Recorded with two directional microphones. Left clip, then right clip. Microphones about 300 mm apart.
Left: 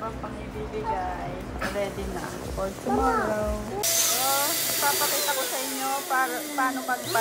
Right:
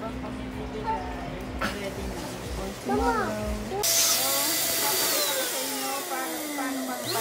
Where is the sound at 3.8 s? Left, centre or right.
Centre.